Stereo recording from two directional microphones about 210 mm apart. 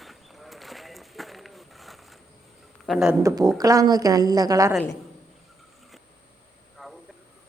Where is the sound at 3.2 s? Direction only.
20° right (ahead or behind).